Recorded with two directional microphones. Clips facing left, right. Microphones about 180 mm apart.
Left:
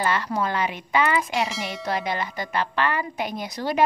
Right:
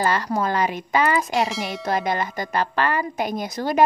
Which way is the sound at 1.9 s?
45° right (ahead or behind).